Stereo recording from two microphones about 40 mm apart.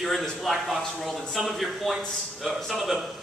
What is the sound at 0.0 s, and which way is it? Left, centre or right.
A man's voice, centre.